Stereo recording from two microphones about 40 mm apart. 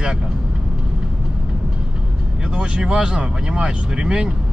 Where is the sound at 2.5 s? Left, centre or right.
Right.